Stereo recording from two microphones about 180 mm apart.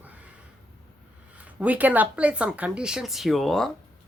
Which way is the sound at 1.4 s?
10° right (ahead or behind).